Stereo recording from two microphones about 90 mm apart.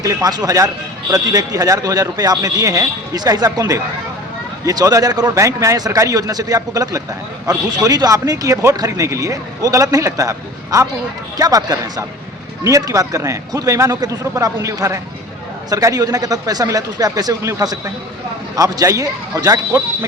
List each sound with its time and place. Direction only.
0.0 s speech: 40° right (ahead or behind)
18.5 s speech: 40° right (ahead or behind)